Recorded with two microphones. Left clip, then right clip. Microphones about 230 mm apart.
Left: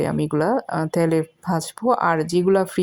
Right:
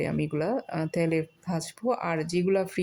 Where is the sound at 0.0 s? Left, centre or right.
Centre.